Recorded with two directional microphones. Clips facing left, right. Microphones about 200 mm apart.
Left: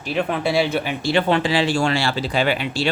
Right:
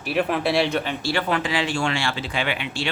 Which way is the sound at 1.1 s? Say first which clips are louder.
Left 6 dB; 30° left (ahead or behind).